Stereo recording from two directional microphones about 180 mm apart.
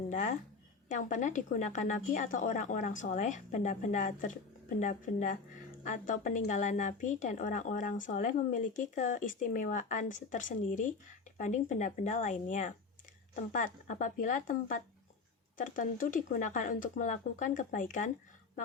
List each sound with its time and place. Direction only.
0.1 s a woman's voice: 45° left (ahead or behind)